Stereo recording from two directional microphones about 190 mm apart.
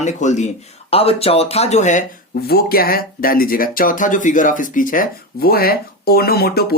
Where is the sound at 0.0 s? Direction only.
40° left (ahead or behind).